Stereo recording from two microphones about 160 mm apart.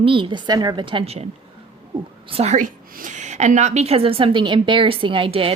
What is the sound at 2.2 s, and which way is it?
A woman's voice, 40° right (ahead or behind).